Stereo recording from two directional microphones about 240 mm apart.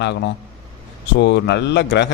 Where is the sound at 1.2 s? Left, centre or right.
Left.